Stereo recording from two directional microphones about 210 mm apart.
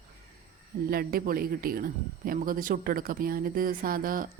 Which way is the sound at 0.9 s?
45° right (ahead or behind).